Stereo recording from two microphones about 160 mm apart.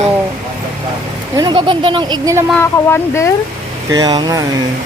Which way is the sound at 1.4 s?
30° right (ahead or behind).